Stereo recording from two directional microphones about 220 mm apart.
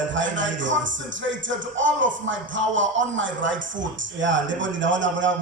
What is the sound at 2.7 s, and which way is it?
A man's voice, 60° right (ahead or behind).